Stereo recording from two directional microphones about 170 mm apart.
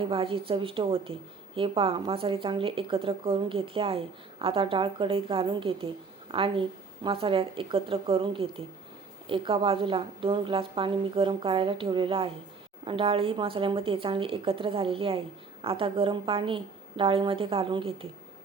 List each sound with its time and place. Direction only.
0.0 s a woman's voice: 30° right (ahead or behind)